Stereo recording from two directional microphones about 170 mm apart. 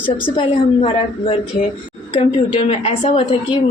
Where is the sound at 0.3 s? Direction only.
30° left (ahead or behind).